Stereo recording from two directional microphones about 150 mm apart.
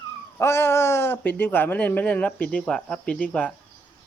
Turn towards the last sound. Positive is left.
turn(degrees=10)  # may be behind; listen again after turning